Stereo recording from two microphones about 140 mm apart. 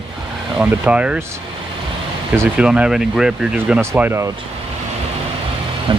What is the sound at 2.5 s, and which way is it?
Speech, 5° right (ahead or behind).